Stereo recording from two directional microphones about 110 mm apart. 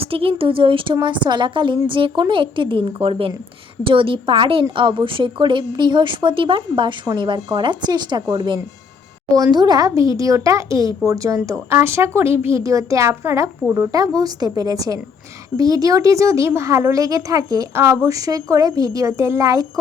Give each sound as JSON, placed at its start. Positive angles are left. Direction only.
{"t": 0.0, "sound": "a woman's voice", "side_deg": -60}